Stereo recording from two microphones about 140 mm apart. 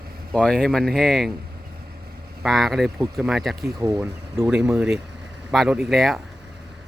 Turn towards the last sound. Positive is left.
turn(degrees=0)  # may be behind; listen again after turning